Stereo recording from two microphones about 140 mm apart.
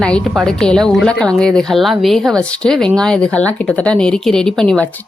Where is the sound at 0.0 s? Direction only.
5° left (ahead or behind).